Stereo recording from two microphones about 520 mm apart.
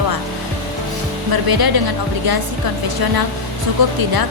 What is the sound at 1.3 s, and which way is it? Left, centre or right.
A woman's voice, right.